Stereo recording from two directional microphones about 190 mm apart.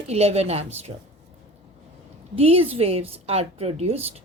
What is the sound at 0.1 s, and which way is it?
Speech, 35° right (ahead or behind).